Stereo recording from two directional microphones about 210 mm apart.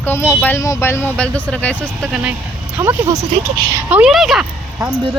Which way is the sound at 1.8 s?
5° right (ahead or behind).